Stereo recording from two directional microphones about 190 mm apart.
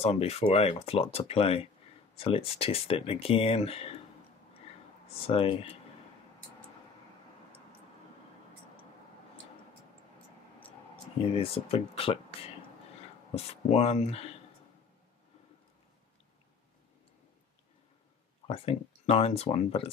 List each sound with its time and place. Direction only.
0.0 s speech: 30° left (ahead or behind)
5.2 s speech: 30° left (ahead or behind)
11.3 s speech: 30° left (ahead or behind)
18.5 s speech: 30° left (ahead or behind)